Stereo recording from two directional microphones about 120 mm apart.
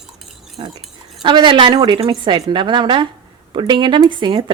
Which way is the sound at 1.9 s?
45° right (ahead or behind).